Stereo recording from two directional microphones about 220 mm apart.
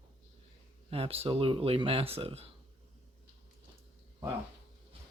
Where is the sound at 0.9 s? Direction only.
25° right (ahead or behind).